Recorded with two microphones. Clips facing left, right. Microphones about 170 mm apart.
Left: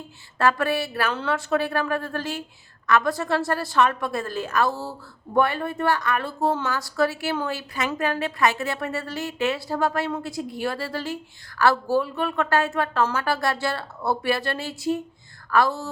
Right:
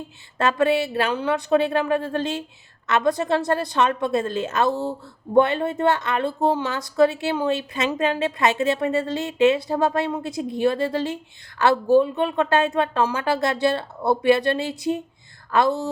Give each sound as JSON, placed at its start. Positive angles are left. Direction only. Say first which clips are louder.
{"t": 0.3, "sound": "a woman's voice", "louder": "right 3 dB", "side_deg": -20}